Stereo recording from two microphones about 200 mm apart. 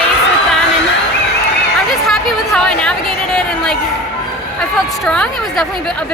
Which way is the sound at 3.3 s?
5° left (ahead or behind).